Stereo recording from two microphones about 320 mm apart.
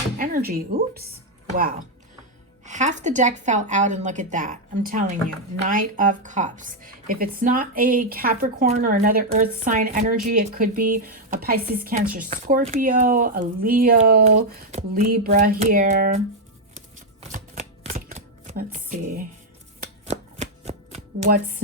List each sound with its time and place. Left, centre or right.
0.2 s a woman's voice: right
2.6 s speech: right
16.7 s chopping: right